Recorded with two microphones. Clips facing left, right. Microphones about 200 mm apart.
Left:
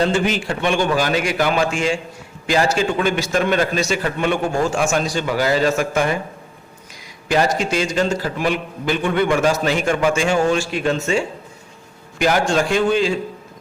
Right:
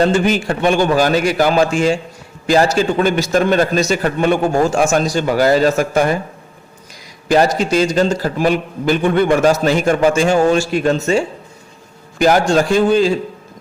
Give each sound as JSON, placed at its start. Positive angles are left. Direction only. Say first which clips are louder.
{"t": 0.0, "sound": "a man's voice", "louder": "right 4 dB", "side_deg": -45}
{"t": 7.3, "sound": "a man's voice", "louder": "right 5 dB", "side_deg": -40}
{"t": 12.2, "sound": "a man's voice", "louder": "right 5 dB", "side_deg": -40}